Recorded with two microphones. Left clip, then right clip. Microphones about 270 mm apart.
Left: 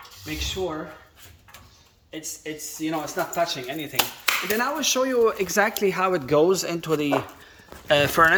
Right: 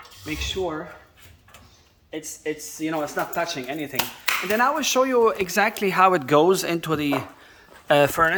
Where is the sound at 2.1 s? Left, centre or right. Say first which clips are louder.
Right 4 dB; centre.